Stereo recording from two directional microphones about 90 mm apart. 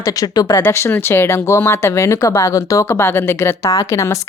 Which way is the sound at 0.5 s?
30° left (ahead or behind).